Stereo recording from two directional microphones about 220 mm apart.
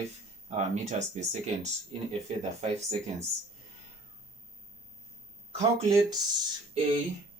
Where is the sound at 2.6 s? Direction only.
30° right (ahead or behind).